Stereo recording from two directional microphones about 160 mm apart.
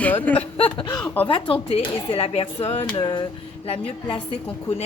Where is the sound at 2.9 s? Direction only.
30° left (ahead or behind).